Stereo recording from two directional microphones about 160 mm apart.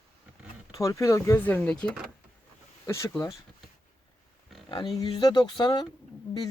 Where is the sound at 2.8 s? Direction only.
15° left (ahead or behind).